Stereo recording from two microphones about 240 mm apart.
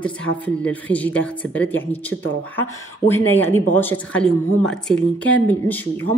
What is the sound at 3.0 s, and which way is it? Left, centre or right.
Speech, centre.